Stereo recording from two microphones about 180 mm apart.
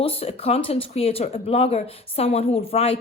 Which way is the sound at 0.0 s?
30° left (ahead or behind).